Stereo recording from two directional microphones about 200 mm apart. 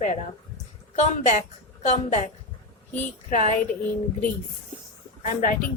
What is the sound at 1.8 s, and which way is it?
A woman's voice, 35° left (ahead or behind).